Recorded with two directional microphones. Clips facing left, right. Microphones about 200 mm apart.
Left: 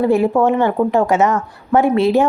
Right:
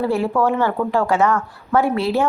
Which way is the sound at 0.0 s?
20° left (ahead or behind).